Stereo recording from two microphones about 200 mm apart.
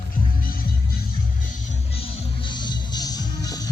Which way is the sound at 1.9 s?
25° left (ahead or behind).